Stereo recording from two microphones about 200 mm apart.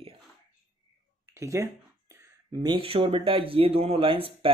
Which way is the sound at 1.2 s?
15° right (ahead or behind).